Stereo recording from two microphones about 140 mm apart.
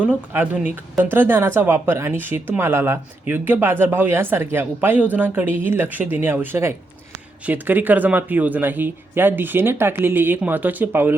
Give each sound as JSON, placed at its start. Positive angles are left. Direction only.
{"t": 0.3, "sound": "speech", "side_deg": -10}